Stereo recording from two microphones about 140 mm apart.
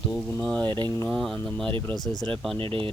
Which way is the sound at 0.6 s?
35° right (ahead or behind).